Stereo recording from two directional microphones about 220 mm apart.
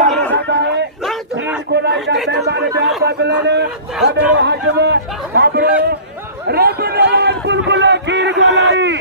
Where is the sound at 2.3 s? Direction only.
50° right (ahead or behind).